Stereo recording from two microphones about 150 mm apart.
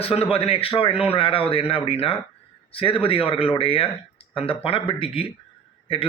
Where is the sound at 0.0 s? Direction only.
40° left (ahead or behind).